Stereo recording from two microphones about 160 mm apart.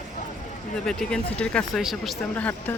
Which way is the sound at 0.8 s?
5° left (ahead or behind).